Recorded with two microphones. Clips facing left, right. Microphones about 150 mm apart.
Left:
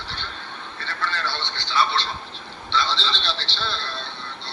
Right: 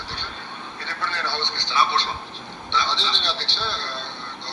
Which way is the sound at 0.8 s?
15° right (ahead or behind).